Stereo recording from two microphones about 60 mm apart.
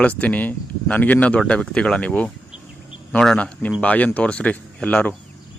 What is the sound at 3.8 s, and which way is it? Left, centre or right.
Speech, left.